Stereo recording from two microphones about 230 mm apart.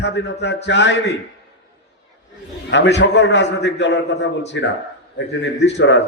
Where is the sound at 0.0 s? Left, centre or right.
Left.